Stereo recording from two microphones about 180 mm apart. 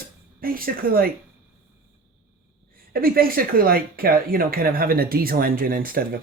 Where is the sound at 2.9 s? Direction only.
55° right (ahead or behind).